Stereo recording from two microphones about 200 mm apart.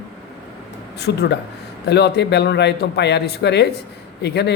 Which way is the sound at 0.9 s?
55° left (ahead or behind).